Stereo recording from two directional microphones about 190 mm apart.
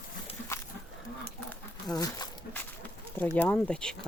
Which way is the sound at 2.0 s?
20° left (ahead or behind).